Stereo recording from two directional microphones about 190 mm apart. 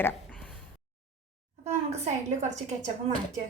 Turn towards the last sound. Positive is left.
turn(degrees=-35)  # may be behind; listen again after turning